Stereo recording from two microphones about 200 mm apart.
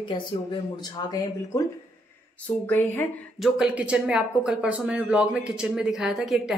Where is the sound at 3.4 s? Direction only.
5° right (ahead or behind).